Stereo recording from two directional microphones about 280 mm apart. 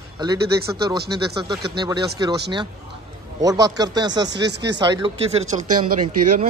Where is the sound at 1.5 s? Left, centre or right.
Centre.